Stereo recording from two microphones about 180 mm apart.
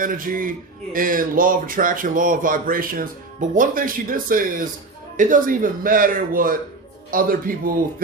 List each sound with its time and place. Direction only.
0.0 s speech: 50° right (ahead or behind)